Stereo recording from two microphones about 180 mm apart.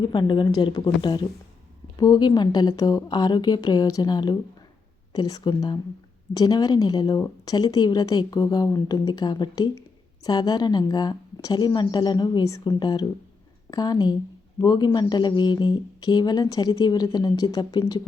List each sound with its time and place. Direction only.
0.0 s speech: 25° left (ahead or behind)